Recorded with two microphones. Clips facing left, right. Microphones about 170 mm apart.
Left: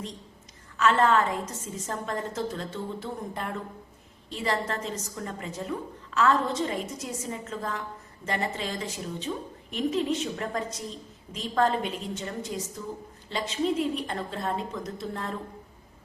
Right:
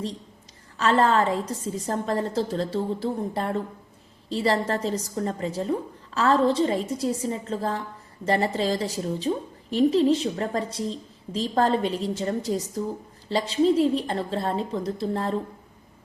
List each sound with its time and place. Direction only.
0.8 s a woman's voice: 35° right (ahead or behind)